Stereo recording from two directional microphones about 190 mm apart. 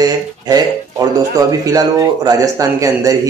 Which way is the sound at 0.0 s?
20° right (ahead or behind).